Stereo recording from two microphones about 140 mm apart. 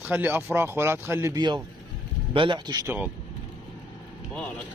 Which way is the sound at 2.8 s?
10° right (ahead or behind).